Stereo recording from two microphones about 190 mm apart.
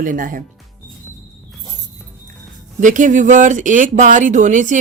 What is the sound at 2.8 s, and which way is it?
Speech, 40° right (ahead or behind).